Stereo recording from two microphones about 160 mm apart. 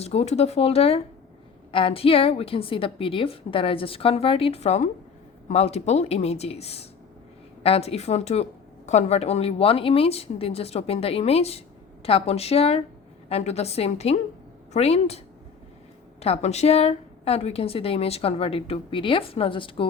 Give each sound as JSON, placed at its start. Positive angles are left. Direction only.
{"t": 0.0, "sound": "a woman's voice", "side_deg": 40}
{"t": 16.2, "sound": "a woman's voice", "side_deg": 40}